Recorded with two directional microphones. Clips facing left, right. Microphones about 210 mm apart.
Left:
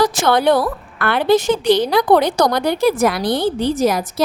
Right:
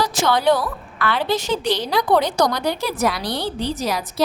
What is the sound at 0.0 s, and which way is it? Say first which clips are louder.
A woman's voice: left 4 dB; 55° left (ahead or behind).